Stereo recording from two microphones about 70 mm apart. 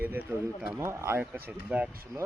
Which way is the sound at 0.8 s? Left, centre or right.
Right.